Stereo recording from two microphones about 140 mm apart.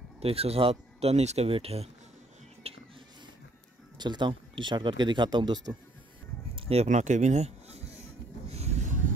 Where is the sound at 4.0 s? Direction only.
35° right (ahead or behind).